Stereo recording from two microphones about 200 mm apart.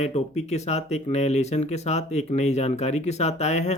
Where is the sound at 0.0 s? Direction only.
35° left (ahead or behind).